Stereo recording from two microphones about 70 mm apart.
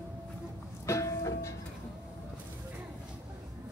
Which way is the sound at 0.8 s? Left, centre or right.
Left.